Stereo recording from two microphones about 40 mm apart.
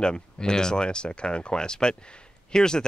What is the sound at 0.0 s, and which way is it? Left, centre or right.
Speech, centre.